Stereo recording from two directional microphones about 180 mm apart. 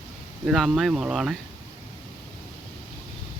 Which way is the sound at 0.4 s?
Centre (ahead or behind).